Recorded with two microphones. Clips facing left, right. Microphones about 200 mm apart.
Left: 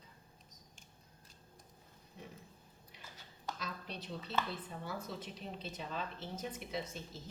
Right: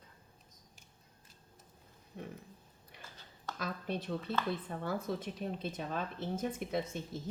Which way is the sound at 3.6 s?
55° right (ahead or behind).